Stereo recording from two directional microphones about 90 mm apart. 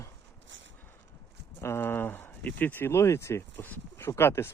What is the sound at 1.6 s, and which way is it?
Speech, 25° left (ahead or behind).